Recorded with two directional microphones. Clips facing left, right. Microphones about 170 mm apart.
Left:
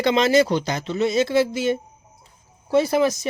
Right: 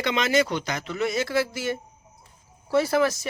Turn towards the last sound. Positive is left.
turn(degrees=20)  # may be behind; listen again after turning